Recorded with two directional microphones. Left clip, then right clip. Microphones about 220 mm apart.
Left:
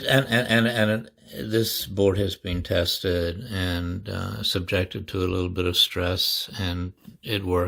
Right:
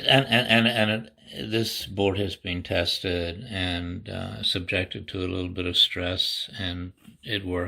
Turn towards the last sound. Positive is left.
turn(degrees=50)  # may be behind; listen again after turning